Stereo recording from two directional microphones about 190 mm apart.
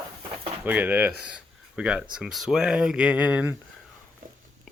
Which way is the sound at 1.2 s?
5° right (ahead or behind).